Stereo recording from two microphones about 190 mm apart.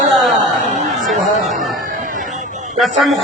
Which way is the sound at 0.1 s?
Centre (ahead or behind).